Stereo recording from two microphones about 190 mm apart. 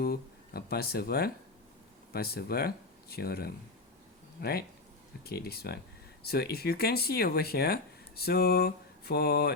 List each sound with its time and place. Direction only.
0.0 s speech: 55° left (ahead or behind)